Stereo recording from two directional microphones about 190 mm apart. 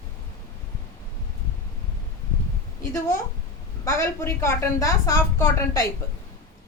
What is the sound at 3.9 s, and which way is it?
A woman's voice, 15° left (ahead or behind).